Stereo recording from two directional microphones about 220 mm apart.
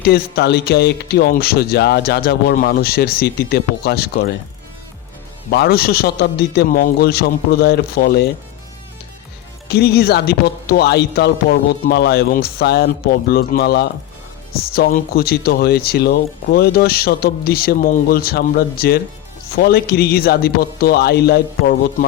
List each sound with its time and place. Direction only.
0.0 s speech: 45° left (ahead or behind)
5.5 s speech: 45° left (ahead or behind)
9.6 s speech: 45° left (ahead or behind)